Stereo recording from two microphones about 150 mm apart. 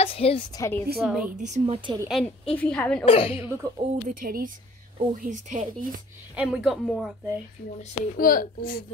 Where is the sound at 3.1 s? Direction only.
40° left (ahead or behind).